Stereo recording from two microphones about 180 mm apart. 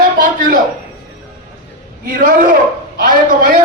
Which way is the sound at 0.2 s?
50° right (ahead or behind).